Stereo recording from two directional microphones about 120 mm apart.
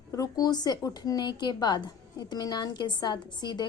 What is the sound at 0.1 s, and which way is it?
Speech, 30° left (ahead or behind).